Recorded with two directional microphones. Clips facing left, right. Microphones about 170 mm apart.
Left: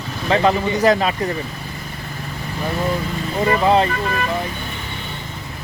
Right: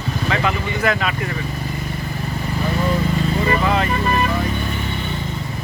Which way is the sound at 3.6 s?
30° left (ahead or behind).